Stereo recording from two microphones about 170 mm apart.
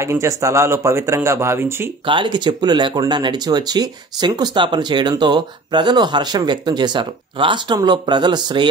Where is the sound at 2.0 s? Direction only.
30° right (ahead or behind).